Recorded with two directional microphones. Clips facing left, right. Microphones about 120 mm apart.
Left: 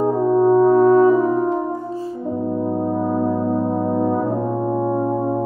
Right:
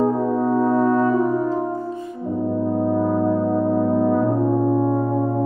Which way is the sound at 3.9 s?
5° left (ahead or behind).